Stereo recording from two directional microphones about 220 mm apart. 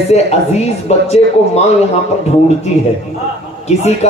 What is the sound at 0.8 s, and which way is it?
Speech, 30° left (ahead or behind).